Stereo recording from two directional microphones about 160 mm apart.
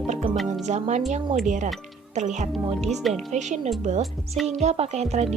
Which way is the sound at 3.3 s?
45° right (ahead or behind).